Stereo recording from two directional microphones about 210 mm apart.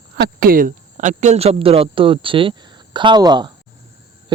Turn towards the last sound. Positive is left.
turn(degrees=-20)  # may be behind; listen again after turning